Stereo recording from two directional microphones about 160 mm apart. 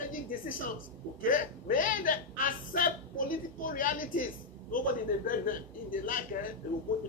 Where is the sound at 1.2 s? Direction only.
60° left (ahead or behind).